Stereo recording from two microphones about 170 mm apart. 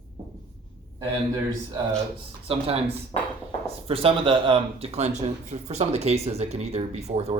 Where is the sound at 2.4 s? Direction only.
35° right (ahead or behind).